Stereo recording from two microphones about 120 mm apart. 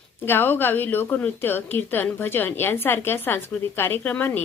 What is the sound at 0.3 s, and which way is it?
A woman's voice, 15° left (ahead or behind).